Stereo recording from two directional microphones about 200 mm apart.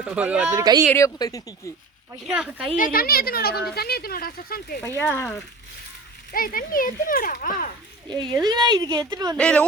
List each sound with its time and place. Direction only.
0.0 s a woman's voice: 5° right (ahead or behind)
0.6 s a woman's voice: 20° right (ahead or behind)
0.9 s speech: 15° left (ahead or behind)
2.2 s speech: 5° right (ahead or behind)
2.7 s speech: 45° left (ahead or behind)
4.8 s speech: 10° left (ahead or behind)
6.3 s speech: 45° left (ahead or behind)
8.4 s a woman's voice: 20° right (ahead or behind)
9.4 s speech: 5° left (ahead or behind)